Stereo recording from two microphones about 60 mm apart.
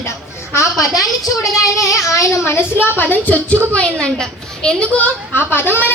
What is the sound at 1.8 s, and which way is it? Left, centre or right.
Speech, left.